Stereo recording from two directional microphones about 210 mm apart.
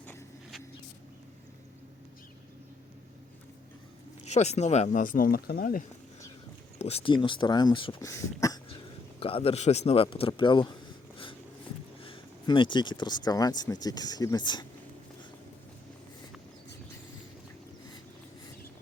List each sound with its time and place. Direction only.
0.0 s a sound: 10° left (ahead or behind)
4.3 s speech: 30° left (ahead or behind)
6.7 s speech: 30° left (ahead or behind)
9.2 s speech: 25° left (ahead or behind)
12.0 s speech: 25° left (ahead or behind)